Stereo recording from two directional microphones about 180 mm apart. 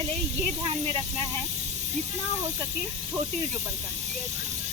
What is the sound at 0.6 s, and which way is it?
Speech, 30° right (ahead or behind).